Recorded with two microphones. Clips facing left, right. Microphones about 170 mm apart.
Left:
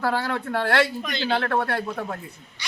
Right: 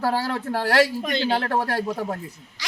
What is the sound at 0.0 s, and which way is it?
A man's voice, 30° right (ahead or behind).